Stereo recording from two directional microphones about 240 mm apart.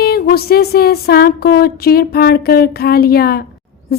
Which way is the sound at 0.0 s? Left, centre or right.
Left.